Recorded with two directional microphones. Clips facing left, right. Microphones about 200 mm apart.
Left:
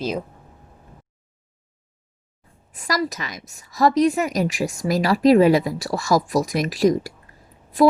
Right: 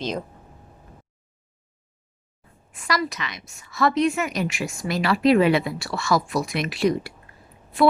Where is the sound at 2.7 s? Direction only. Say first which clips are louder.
Left 2 dB; 40° left (ahead or behind).